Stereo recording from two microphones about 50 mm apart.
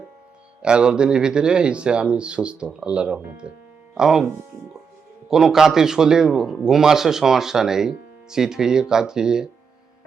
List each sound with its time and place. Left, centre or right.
0.6 s speech: centre
5.3 s speech: centre